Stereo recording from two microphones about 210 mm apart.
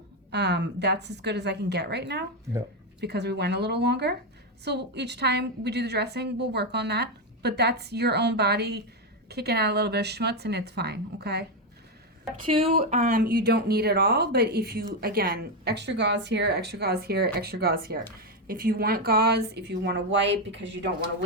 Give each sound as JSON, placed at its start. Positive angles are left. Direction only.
{"t": 0.3, "sound": "speech", "side_deg": -55}
{"t": 12.5, "sound": "speech", "side_deg": -25}
{"t": 13.1, "sound": "speech", "side_deg": -45}